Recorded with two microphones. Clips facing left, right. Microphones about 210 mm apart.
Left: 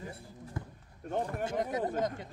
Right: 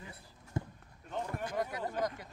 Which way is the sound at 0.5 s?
25° right (ahead or behind).